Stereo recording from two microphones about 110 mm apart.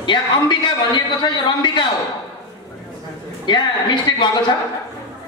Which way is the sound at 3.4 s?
45° left (ahead or behind).